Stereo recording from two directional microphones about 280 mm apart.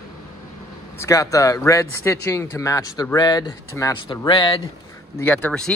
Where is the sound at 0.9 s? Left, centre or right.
Centre.